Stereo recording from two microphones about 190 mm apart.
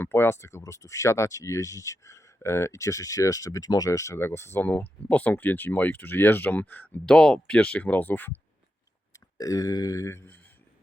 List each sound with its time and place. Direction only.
0.0 s speech: 10° left (ahead or behind)